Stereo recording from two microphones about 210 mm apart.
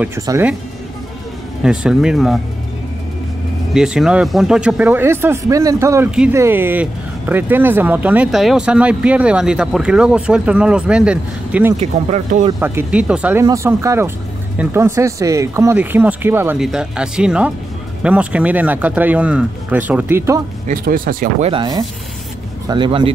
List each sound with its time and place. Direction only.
0.0 s speech: 10° right (ahead or behind)
1.6 s speech: 5° right (ahead or behind)
3.7 s speech: 5° right (ahead or behind)
11.7 s speech: 35° right (ahead or behind)
12.5 s speech: 10° right (ahead or behind)
20.6 s speech: 40° right (ahead or behind)
21.5 s speech: 20° right (ahead or behind)